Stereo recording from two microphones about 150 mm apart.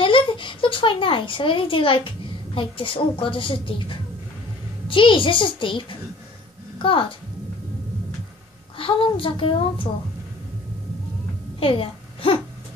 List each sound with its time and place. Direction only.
0.0 s a child's voice: 35° left (ahead or behind)
8.7 s a woman's voice: 35° left (ahead or behind)
11.6 s a woman's voice: 35° left (ahead or behind)